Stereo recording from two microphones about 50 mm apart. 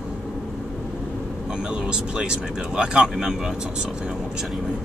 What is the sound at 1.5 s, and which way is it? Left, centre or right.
Speech, centre.